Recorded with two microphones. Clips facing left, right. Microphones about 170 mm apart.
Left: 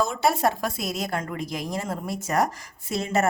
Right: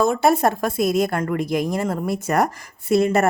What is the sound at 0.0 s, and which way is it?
A woman's voice, 55° right (ahead or behind).